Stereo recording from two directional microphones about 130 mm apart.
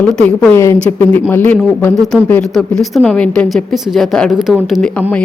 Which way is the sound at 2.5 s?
Centre (ahead or behind).